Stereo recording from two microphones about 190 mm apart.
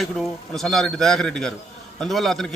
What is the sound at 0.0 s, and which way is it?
A man's voice, centre (ahead or behind).